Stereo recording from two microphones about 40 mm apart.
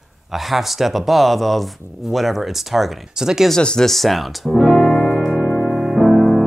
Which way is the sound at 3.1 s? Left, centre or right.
Centre.